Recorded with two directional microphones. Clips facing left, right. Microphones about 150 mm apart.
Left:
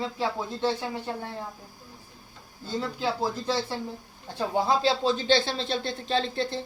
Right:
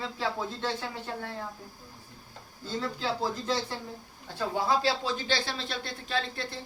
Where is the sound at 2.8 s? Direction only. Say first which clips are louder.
Left 3 dB; 15° left (ahead or behind).